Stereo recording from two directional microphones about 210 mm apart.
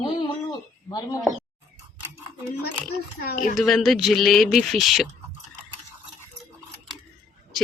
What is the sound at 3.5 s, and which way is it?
Speech, centre (ahead or behind).